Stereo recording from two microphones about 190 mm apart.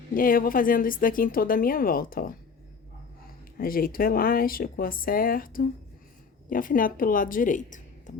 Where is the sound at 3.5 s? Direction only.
50° left (ahead or behind).